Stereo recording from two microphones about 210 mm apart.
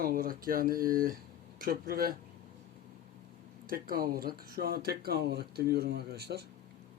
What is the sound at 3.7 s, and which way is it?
Speech, 45° right (ahead or behind).